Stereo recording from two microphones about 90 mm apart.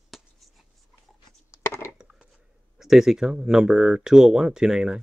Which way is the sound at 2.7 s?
5° right (ahead or behind).